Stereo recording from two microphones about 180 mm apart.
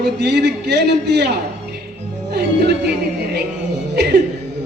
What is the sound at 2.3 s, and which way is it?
Music, 65° right (ahead or behind).